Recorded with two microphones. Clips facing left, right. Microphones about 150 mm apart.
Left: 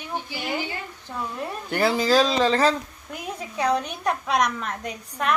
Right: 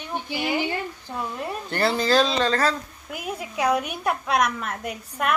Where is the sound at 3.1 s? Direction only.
10° right (ahead or behind).